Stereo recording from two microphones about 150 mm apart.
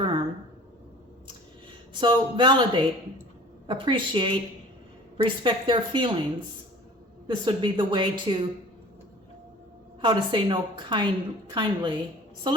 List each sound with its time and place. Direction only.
1.9 s a woman's voice: 30° right (ahead or behind)
7.3 s a woman's voice: 30° right (ahead or behind)
10.0 s a woman's voice: 30° right (ahead or behind)